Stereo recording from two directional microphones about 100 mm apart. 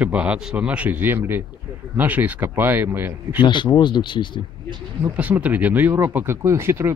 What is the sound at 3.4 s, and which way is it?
Speech, 50° left (ahead or behind).